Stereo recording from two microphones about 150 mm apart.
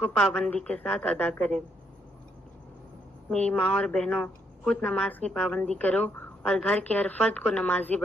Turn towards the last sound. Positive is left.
turn(degrees=10)  # may be behind; listen again after turning